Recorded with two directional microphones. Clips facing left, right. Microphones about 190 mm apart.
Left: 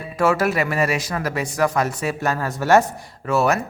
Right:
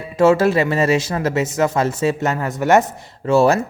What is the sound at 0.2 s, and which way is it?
Speech, 25° right (ahead or behind).